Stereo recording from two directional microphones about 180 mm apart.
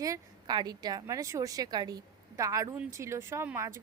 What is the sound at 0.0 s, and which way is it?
A woman's voice, 20° right (ahead or behind).